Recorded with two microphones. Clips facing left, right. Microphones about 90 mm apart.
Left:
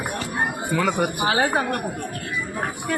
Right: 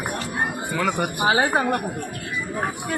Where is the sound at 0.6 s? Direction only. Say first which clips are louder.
Left 3 dB; centre (ahead or behind).